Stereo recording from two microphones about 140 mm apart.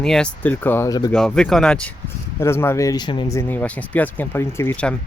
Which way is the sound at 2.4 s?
20° left (ahead or behind).